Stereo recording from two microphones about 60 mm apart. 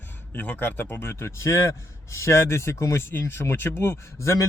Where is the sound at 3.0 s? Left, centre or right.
Left.